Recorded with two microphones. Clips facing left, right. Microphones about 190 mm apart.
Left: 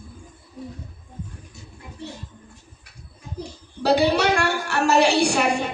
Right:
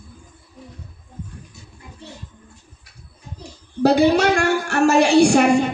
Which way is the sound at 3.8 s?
45° right (ahead or behind).